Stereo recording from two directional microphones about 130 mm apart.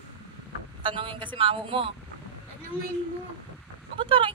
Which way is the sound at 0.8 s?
40° right (ahead or behind).